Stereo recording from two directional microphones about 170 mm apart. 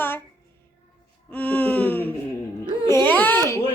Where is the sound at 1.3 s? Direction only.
10° left (ahead or behind).